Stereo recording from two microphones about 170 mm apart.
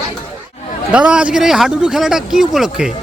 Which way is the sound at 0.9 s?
5° right (ahead or behind).